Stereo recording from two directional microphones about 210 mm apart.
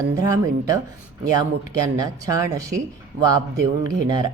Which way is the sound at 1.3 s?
20° right (ahead or behind).